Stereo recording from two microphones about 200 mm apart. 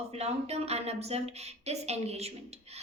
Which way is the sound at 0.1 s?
30° right (ahead or behind).